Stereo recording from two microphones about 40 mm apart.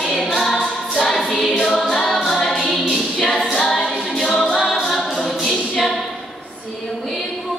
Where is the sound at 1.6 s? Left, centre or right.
Centre.